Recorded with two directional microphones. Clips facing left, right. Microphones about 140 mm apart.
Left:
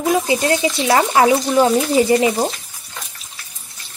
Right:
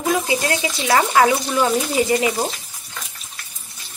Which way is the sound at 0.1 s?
25° left (ahead or behind).